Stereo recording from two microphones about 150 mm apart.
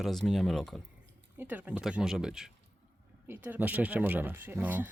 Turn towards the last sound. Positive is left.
turn(degrees=-15)  # may be behind; listen again after turning